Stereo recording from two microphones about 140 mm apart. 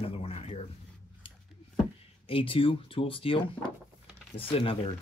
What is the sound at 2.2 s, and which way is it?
Speech, 40° left (ahead or behind).